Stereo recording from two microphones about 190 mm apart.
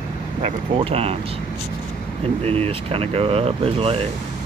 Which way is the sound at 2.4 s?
30° right (ahead or behind).